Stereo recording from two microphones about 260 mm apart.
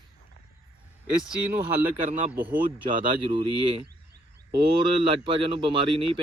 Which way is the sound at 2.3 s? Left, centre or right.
Centre.